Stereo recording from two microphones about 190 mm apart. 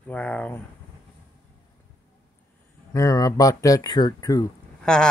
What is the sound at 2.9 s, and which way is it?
Speech, 15° left (ahead or behind).